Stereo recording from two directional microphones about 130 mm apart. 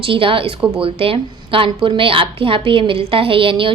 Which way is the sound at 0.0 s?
40° right (ahead or behind).